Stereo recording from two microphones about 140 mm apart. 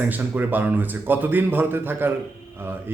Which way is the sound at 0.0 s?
15° right (ahead or behind).